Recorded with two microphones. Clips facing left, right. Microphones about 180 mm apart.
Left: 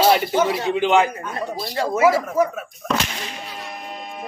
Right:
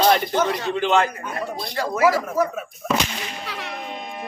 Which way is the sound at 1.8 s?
25° left (ahead or behind).